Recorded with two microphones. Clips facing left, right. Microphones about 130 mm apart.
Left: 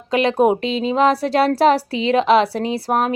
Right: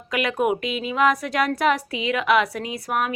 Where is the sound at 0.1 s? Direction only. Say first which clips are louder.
Left 7 dB; 30° left (ahead or behind).